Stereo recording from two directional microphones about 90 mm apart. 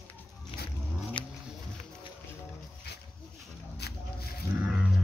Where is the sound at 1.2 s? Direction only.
65° left (ahead or behind).